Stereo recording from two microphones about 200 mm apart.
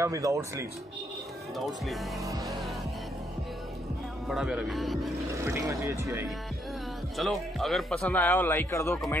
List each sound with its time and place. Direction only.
0.0 s speech: 15° right (ahead or behind)
1.7 s speech: centre (ahead or behind)
2.2 s speech: 15° right (ahead or behind)
4.3 s speech: 5° right (ahead or behind)
5.3 s speech: 15° right (ahead or behind)
7.2 s a man's voice: centre (ahead or behind)
8.9 s speech: centre (ahead or behind)